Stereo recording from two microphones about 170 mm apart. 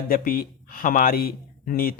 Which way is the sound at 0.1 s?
60° left (ahead or behind).